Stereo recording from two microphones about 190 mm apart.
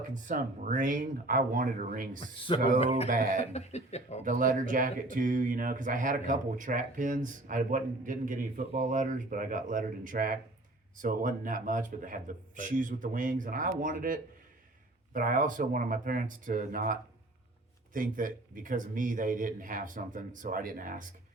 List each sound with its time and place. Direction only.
0.1 s speech: 45° right (ahead or behind)
3.5 s speech: 35° left (ahead or behind)
4.2 s speech: 45° right (ahead or behind)